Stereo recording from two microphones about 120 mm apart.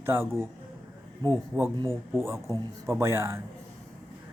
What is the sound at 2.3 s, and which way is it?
Speech, 25° right (ahead or behind).